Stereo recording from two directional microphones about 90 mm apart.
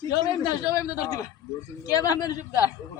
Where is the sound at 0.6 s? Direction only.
40° left (ahead or behind).